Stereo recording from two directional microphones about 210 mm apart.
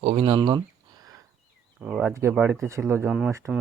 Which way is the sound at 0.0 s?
25° right (ahead or behind).